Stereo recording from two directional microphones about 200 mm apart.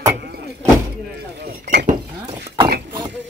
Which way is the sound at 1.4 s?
45° right (ahead or behind).